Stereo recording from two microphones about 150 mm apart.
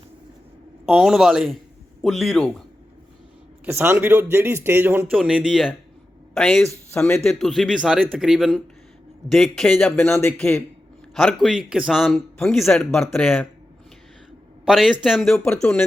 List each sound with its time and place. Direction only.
0.9 s speech: centre (ahead or behind)
3.7 s a woman's voice: 15° right (ahead or behind); by 10.1 s 5° left (ahead or behind)
10.1 s a man's voice: 15° left (ahead or behind)
11.1 s a man's voice: 5° left (ahead or behind)
14.6 s speech: centre (ahead or behind)